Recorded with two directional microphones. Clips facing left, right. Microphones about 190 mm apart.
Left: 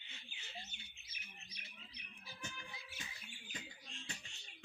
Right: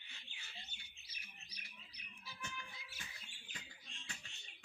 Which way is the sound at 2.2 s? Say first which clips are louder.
Even; 35° left (ahead or behind).